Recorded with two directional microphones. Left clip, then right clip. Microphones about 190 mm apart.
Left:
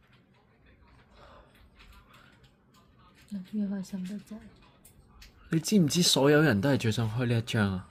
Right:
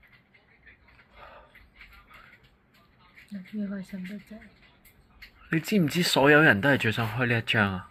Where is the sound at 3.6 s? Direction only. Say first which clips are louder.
Left 1 dB; 15° left (ahead or behind).